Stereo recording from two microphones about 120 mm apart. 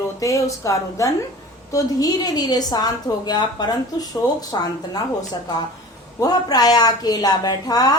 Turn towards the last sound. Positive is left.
turn(degrees=30)  # may be behind; listen again after turning